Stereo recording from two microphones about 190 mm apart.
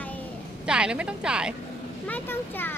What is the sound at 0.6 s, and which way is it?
Speech, 5° right (ahead or behind).